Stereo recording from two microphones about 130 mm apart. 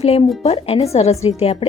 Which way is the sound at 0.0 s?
50° left (ahead or behind).